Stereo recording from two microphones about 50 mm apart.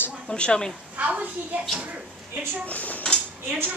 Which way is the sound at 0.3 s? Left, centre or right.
Centre.